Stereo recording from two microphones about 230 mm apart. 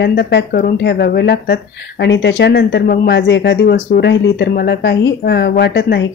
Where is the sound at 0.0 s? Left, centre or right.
Left.